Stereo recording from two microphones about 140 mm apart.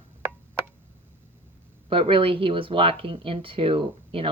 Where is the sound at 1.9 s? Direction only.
40° right (ahead or behind).